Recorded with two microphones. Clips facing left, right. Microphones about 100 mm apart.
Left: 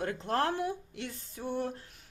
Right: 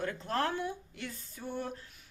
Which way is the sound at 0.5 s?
60° left (ahead or behind).